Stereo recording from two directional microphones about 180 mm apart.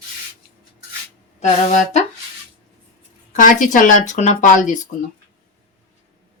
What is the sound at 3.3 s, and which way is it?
Speech, 45° left (ahead or behind).